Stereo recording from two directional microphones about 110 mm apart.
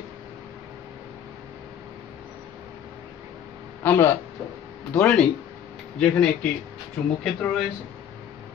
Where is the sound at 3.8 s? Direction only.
20° left (ahead or behind).